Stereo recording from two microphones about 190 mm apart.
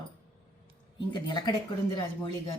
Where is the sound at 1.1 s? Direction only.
20° left (ahead or behind).